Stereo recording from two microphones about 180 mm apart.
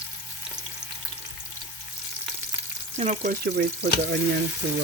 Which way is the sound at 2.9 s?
40° right (ahead or behind).